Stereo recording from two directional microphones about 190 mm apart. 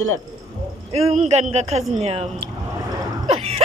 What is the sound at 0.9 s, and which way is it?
A man's voice, 35° right (ahead or behind).